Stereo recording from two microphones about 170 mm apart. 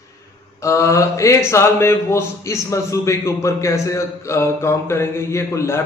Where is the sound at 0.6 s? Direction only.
15° left (ahead or behind).